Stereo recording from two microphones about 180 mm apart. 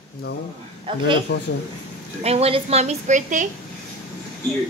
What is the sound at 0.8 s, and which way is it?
Speech, 30° right (ahead or behind).